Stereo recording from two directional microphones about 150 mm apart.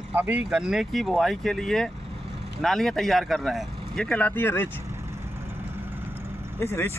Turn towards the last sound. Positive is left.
turn(degrees=15)  # may be behind; listen again after turning